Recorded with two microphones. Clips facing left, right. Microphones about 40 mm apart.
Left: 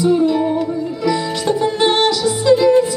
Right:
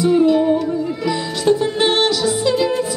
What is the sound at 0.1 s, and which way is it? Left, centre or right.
Music, centre.